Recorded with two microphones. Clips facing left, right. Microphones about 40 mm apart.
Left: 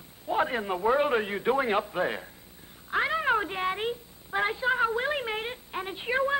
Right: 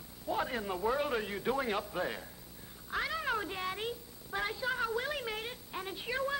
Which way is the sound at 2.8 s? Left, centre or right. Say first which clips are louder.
Left 9 dB; left.